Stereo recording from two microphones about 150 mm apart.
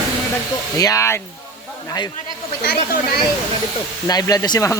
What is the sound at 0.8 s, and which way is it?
Speech, 20° left (ahead or behind).